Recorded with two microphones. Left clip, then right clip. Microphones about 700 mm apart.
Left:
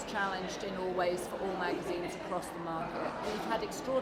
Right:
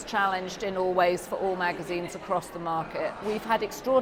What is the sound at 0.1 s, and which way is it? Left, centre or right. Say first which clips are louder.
A woman's voice: right 9 dB; right.